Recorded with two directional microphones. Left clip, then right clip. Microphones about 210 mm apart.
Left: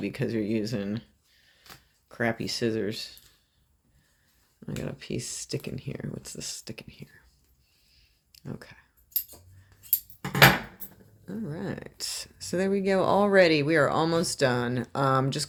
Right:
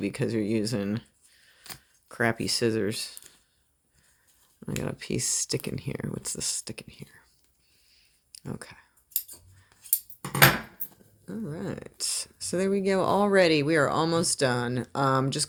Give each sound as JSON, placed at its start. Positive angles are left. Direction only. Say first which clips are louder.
{"t": 0.0, "sound": "speech", "louder": "right 1 dB", "side_deg": -25}
{"t": 4.6, "sound": "speech", "louder": "right 3 dB", "side_deg": -25}
{"t": 7.9, "sound": "clicking", "louder": "right 5 dB", "side_deg": -30}
{"t": 11.3, "sound": "speech", "louder": "even", "side_deg": -15}